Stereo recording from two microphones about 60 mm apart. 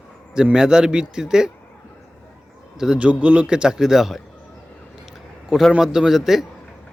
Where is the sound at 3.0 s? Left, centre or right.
Right; by 4.2 s centre.